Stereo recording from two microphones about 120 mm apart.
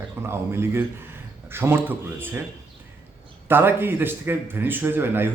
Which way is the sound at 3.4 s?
20° right (ahead or behind).